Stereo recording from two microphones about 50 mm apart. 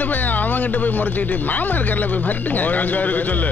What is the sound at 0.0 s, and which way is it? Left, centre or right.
Speech, left.